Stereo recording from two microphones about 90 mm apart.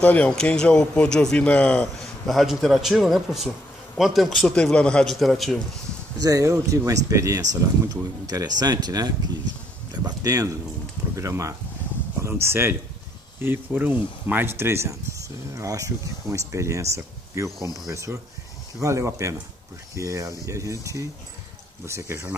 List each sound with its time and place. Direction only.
0.0 s speech: 15° left (ahead or behind)
2.2 s a man's voice: centre (ahead or behind)
6.1 s speech: 40° right (ahead or behind)
13.7 s speech: 20° right (ahead or behind)